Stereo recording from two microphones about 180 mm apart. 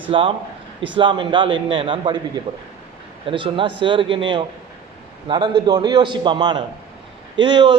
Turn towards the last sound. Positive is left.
turn(degrees=-25)  # may be behind; listen again after turning